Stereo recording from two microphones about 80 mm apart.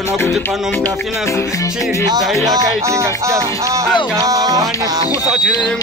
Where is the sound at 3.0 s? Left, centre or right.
Right.